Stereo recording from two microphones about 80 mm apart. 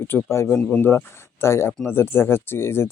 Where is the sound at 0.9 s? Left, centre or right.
Left.